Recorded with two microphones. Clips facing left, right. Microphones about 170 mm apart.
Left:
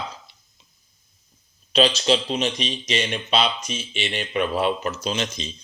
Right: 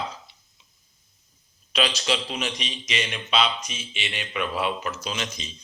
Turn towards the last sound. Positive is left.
turn(degrees=30)  # may be behind; listen again after turning